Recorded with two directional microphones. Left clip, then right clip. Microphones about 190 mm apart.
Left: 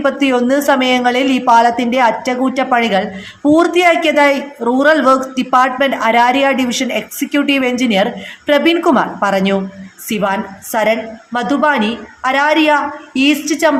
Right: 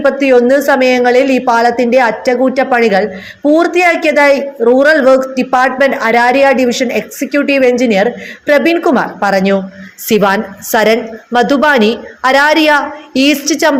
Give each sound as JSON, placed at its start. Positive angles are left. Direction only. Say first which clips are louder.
{"t": 0.0, "sound": "a woman's voice", "louder": "right 6 dB", "side_deg": -5}
{"t": 10.1, "sound": "a woman's voice", "louder": "right 6 dB", "side_deg": -25}